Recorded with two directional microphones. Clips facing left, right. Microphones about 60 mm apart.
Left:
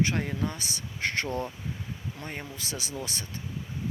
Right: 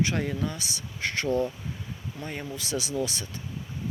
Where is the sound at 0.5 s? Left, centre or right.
Left.